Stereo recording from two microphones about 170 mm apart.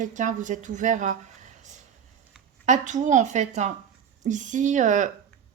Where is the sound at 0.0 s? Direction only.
50° right (ahead or behind).